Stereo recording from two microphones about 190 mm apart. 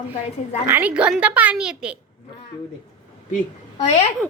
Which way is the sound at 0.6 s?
10° right (ahead or behind).